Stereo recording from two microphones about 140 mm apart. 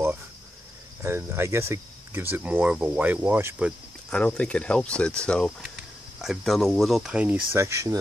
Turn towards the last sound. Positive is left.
turn(degrees=-20)  # may be behind; listen again after turning